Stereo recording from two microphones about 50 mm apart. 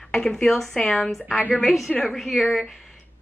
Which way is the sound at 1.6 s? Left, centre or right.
Centre.